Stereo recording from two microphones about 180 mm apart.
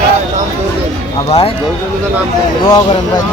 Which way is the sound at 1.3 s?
35° left (ahead or behind).